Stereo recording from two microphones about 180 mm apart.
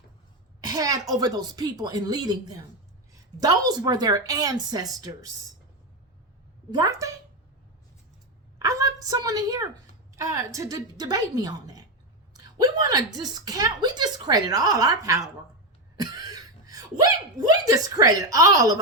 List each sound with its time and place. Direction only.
0.7 s a woman's voice: 20° right (ahead or behind)
6.7 s a woman's voice: 20° right (ahead or behind)
8.5 s a sound: 20° right (ahead or behind)
10.2 s a woman's voice: 15° right (ahead or behind)
16.0 s a sound: 20° right (ahead or behind)
17.5 s a woman's voice: 20° right (ahead or behind)